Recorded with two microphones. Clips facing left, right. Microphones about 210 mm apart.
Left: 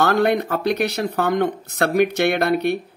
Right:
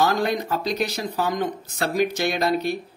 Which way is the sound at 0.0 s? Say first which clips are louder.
Left 4 dB; 65° left (ahead or behind).